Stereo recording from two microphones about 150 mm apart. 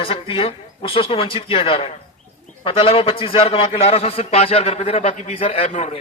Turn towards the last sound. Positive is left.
turn(degrees=45)  # may be behind; listen again after turning